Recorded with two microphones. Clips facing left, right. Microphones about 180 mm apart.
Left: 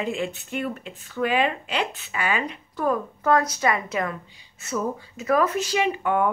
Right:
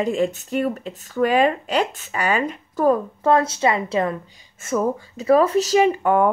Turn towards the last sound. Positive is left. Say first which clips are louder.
# right 6 dB
turn(degrees=-40)  # may be behind; listen again after turning